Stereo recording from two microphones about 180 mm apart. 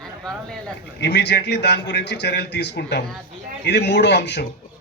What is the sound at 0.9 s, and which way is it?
A man's voice, 70° left (ahead or behind).